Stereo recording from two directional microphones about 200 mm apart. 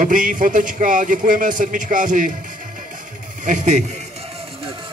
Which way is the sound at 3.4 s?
40° right (ahead or behind).